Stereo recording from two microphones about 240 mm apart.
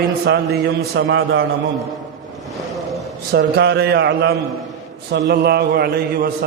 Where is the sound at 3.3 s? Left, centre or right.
Right.